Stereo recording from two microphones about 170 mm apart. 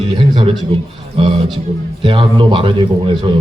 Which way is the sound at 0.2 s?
30° right (ahead or behind).